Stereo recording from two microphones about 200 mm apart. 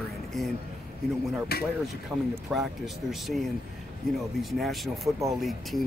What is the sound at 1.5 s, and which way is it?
Speech, 50° left (ahead or behind).